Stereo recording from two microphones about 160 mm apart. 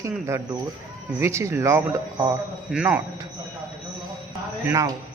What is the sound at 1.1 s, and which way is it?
Speech, 15° right (ahead or behind).